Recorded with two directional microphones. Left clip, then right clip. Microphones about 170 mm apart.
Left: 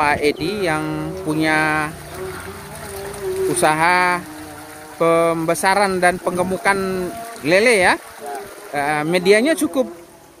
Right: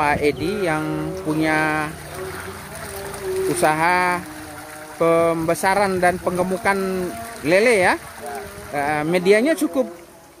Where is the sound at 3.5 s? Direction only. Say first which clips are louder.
Left 2 dB; centre (ahead or behind).